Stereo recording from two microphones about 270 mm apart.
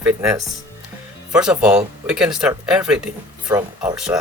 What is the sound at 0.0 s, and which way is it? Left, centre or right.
Speech, centre.